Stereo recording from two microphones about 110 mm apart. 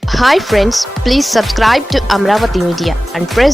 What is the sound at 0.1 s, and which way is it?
Speech, centre (ahead or behind).